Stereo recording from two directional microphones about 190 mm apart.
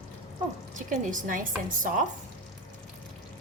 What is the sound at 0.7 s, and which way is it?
Speech, 40° right (ahead or behind).